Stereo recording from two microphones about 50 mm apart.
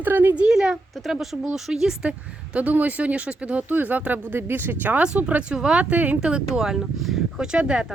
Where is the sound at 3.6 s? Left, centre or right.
Right.